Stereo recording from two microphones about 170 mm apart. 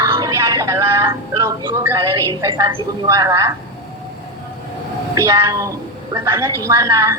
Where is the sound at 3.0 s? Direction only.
20° right (ahead or behind).